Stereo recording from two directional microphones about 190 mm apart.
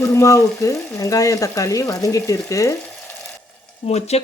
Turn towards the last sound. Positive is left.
turn(degrees=35)  # may be behind; listen again after turning